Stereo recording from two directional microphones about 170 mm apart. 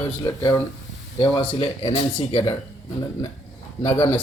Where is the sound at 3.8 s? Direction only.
35° left (ahead or behind).